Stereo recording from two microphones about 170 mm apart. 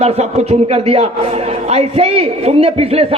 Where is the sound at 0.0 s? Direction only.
40° right (ahead or behind).